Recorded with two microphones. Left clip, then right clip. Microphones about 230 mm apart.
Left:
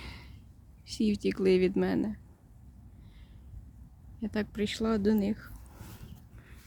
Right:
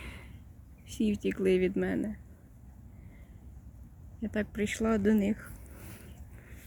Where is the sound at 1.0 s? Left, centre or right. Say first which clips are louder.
Left 2 dB; centre.